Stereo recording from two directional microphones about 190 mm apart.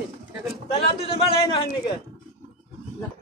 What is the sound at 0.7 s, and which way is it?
Speech, 30° left (ahead or behind).